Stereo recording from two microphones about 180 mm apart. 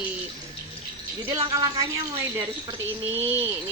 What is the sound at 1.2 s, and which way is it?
Speech, 20° right (ahead or behind).